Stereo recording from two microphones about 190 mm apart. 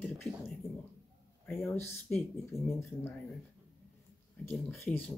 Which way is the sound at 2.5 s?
15° left (ahead or behind).